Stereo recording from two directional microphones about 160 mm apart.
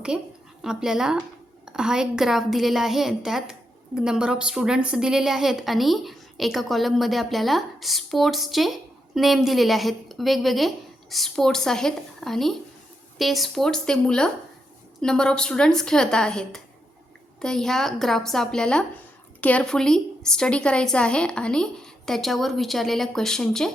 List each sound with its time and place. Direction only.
0.1 s a woman's voice: 5° right (ahead or behind)